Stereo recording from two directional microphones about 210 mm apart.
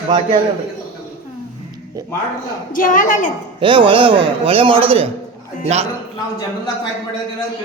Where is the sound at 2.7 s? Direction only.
40° left (ahead or behind).